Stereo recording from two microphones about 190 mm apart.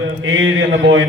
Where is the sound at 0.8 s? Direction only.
90° right.